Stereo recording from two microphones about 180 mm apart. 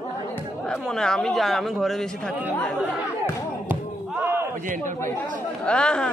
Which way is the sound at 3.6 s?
10° right (ahead or behind).